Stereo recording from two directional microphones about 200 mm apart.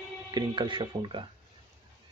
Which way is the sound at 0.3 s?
20° right (ahead or behind).